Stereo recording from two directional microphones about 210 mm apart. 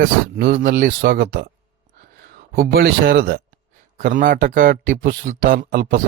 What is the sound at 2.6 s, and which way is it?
A man's voice, 45° right (ahead or behind).